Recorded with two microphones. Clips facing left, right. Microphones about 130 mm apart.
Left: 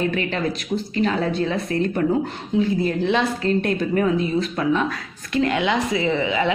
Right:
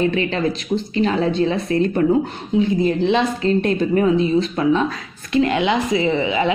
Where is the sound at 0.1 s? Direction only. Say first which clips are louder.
Right 3 dB; 25° right (ahead or behind).